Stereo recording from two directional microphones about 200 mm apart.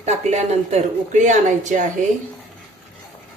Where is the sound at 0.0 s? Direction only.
35° right (ahead or behind).